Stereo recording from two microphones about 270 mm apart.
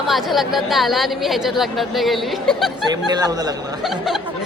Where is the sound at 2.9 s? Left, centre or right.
Centre.